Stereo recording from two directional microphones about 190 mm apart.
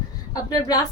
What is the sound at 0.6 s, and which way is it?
Speech, 20° left (ahead or behind).